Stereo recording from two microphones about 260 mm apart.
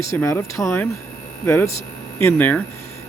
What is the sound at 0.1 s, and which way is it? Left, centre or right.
Speech, centre.